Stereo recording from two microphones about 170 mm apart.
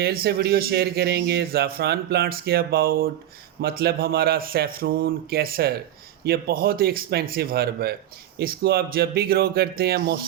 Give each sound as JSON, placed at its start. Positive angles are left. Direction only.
{"t": 0.0, "sound": "a man's voice", "side_deg": -65}